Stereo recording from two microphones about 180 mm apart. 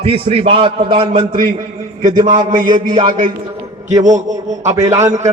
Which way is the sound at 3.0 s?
45° right (ahead or behind).